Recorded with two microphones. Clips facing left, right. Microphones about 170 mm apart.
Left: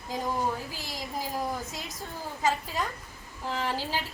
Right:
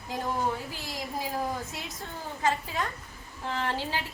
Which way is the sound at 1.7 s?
Centre (ahead or behind).